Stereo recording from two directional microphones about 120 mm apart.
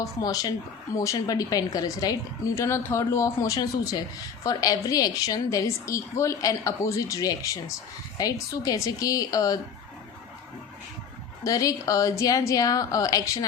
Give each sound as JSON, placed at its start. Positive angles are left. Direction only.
{"t": 0.0, "sound": "a woman's voice", "side_deg": 30}
{"t": 11.4, "sound": "a woman's voice", "side_deg": 30}